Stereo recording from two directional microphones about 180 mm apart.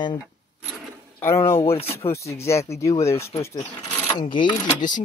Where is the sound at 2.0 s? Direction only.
15° left (ahead or behind).